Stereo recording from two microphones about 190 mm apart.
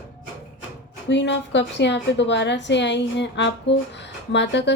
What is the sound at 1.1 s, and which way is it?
A woman's voice, 70° left (ahead or behind).